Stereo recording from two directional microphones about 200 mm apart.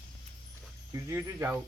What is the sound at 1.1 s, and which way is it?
Speech, 10° right (ahead or behind).